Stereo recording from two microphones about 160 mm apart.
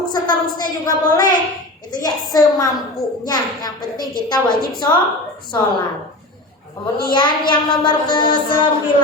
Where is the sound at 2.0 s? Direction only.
25° left (ahead or behind).